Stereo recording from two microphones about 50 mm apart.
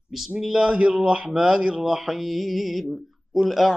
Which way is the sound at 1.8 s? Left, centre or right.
Centre.